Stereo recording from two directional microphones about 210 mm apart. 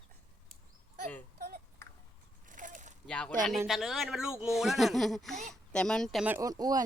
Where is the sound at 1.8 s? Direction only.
10° left (ahead or behind).